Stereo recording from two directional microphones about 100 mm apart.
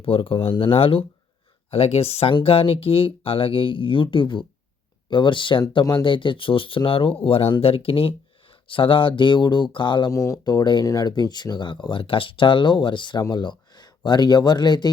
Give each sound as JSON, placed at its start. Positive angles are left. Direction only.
{"t": 0.0, "sound": "speech", "side_deg": 65}
{"t": 1.7, "sound": "speech", "side_deg": 80}
{"t": 2.3, "sound": "speech", "side_deg": 70}
{"t": 10.1, "sound": "speech", "side_deg": 30}
{"t": 10.4, "sound": "speech", "side_deg": 45}